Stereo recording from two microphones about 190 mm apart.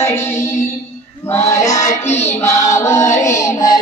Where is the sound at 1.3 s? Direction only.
15° left (ahead or behind).